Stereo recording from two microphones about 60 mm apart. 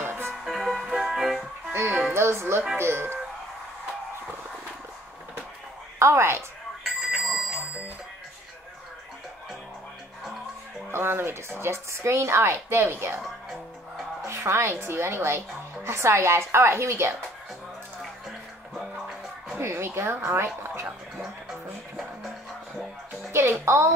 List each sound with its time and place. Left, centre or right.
0.0 s music: right
0.5 s music: centre
1.7 s music: right
2.1 s a woman's voice: right
5.9 s a woman's voice: right
6.8 s a sound: centre
10.9 s a woman's voice: right
14.2 s a woman's voice: right
19.6 s a woman's voice: right
21.2 s music: centre
23.6 s a woman's voice: right